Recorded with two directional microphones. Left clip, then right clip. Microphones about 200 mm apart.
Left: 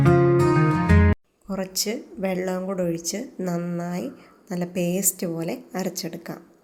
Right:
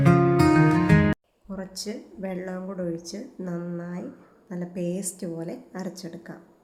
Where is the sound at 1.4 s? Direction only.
20° left (ahead or behind).